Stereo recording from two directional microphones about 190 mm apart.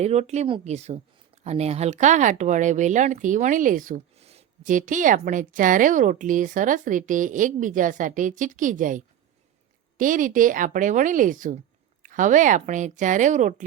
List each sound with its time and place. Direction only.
0.0 s a woman's voice: 35° right (ahead or behind)